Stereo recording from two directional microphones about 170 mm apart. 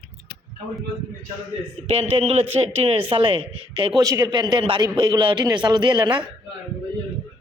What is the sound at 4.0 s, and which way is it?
A man's voice, 20° right (ahead or behind).